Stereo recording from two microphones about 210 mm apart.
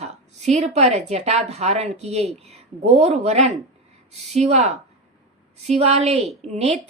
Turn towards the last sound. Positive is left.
turn(degrees=-30)  # may be behind; listen again after turning